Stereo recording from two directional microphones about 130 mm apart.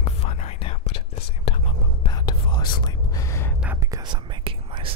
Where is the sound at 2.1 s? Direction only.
35° left (ahead or behind).